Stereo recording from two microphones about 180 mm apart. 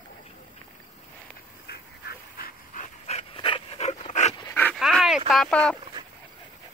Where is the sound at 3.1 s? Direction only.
30° left (ahead or behind).